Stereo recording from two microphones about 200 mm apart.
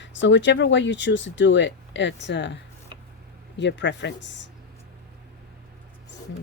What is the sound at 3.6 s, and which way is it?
Speech, 60° left (ahead or behind).